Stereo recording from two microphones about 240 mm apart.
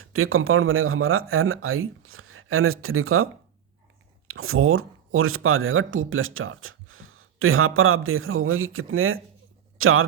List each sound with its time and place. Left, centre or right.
0.0 s speech: right
4.3 s a man's voice: right